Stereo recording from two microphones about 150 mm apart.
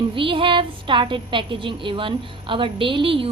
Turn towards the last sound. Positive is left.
turn(degrees=-35)  # may be behind; listen again after turning